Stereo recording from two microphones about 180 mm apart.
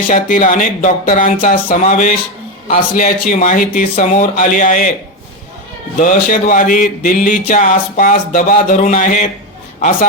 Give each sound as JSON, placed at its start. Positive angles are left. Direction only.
{"t": 0.1, "sound": "speech", "side_deg": 45}
{"t": 6.0, "sound": "speech", "side_deg": 45}